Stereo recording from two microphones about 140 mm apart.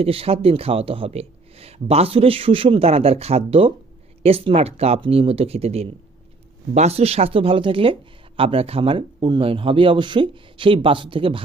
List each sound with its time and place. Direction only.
0.0 s speech: 45° right (ahead or behind)